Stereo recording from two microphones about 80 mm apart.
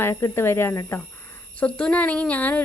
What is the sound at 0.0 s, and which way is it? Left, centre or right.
Speech, left.